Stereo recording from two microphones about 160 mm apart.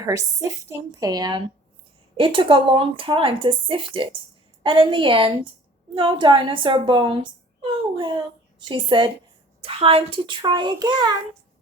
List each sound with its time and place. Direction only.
0.0 s a child's voice: 20° right (ahead or behind)